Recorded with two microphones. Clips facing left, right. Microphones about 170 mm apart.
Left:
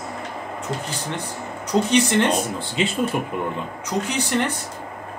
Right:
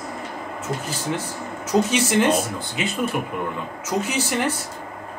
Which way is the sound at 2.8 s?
25° left (ahead or behind).